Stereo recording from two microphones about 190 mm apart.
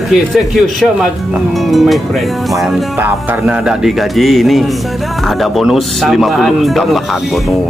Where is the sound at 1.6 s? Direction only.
Centre (ahead or behind).